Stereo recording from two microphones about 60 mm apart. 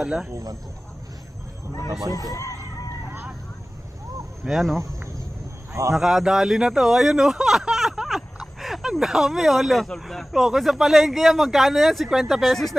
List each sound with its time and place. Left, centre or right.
0.0 s speech: centre
0.3 s speech: right
2.3 s chicken: left
4.5 s speech: centre
5.7 s a man's voice: right
5.9 s speech: centre